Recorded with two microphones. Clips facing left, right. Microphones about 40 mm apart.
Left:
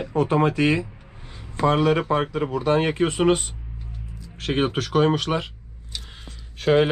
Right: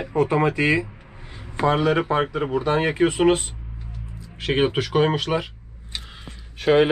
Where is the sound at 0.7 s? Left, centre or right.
Right.